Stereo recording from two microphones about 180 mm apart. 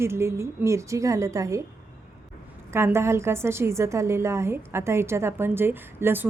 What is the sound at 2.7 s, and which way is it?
A woman's voice, 15° right (ahead or behind).